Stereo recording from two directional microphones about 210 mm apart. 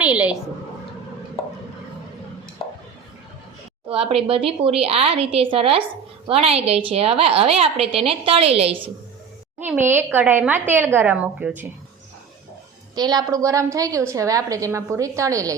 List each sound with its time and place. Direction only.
0.0 s a woman's voice: 5° right (ahead or behind)
4.1 s a woman's voice: 25° right (ahead or behind)
9.6 s a woman's voice: 10° right (ahead or behind)
13.0 s a woman's voice: 20° right (ahead or behind)